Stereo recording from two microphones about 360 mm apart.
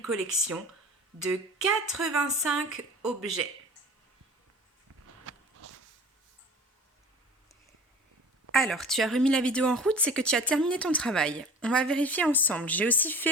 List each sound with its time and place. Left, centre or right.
0.1 s a woman's voice: centre
5.3 s a sound: right
8.5 s a woman's voice: centre